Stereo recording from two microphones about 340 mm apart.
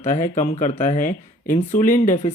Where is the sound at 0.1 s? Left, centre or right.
Left.